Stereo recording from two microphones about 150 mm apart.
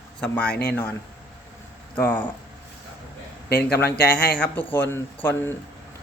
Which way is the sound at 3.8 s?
90° left.